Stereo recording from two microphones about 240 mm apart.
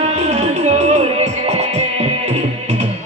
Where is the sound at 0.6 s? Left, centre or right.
Right.